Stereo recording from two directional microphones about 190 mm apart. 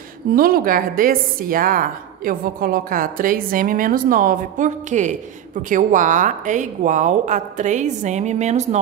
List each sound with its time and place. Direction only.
0.3 s a woman's voice: 50° right (ahead or behind)